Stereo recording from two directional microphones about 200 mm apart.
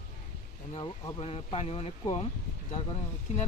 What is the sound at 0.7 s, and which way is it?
Speech, 25° left (ahead or behind).